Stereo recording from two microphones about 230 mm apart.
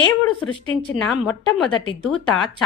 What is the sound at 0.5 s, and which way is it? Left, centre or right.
Speech, left.